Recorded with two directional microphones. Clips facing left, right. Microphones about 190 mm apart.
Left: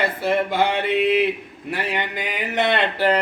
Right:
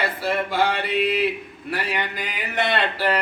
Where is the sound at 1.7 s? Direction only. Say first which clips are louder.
Left 1 dB; 20° left (ahead or behind).